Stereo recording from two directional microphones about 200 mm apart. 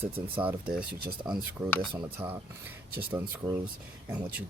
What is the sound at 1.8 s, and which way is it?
Speech, 25° right (ahead or behind).